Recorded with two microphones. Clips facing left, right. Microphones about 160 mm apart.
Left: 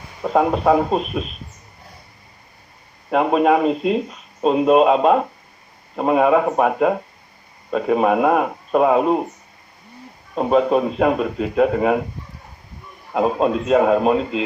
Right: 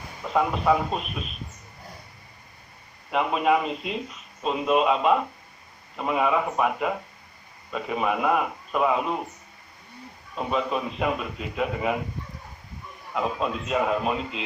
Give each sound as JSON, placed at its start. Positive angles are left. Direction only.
{"t": 0.2, "sound": "speech", "side_deg": 50}
{"t": 3.1, "sound": "speech", "side_deg": 45}
{"t": 10.3, "sound": "speech", "side_deg": 45}
{"t": 13.1, "sound": "a man's voice", "side_deg": 40}